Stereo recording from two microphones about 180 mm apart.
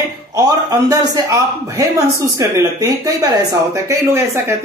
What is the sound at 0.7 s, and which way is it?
Speech, 20° right (ahead or behind).